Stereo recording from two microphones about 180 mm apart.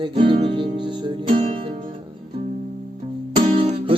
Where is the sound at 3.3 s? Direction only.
30° right (ahead or behind).